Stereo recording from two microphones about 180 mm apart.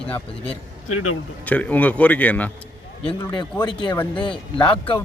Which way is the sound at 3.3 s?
25° left (ahead or behind).